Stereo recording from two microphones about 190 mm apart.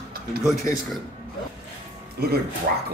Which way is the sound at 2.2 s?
55° right (ahead or behind).